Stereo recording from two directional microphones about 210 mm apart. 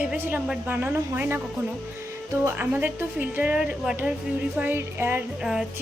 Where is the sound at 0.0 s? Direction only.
10° right (ahead or behind).